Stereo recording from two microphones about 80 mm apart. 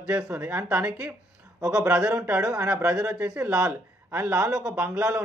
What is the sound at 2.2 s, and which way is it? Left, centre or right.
Speech, centre.